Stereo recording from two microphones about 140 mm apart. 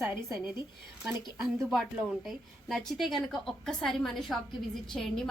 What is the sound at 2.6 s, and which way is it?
A woman's voice, centre (ahead or behind).